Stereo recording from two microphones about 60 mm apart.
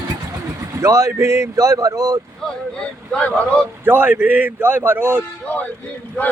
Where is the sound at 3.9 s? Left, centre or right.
Right.